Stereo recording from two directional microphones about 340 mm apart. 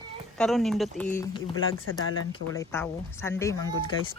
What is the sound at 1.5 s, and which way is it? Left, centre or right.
Speech, left.